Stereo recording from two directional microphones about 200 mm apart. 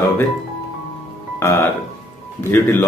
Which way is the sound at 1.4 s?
15° left (ahead or behind).